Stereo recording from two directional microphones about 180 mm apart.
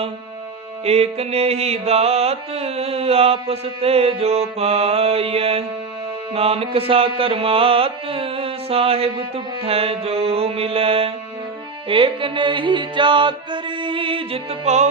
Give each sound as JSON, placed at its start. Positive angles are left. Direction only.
{"t": 0.9, "sound": "music", "side_deg": -35}